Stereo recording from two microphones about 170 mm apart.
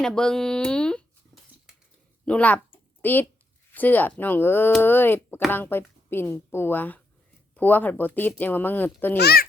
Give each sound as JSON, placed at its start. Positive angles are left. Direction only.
{"t": 0.0, "sound": "speech", "side_deg": 5}
{"t": 2.2, "sound": "speech", "side_deg": 5}
{"t": 9.1, "sound": "a child's voice", "side_deg": 65}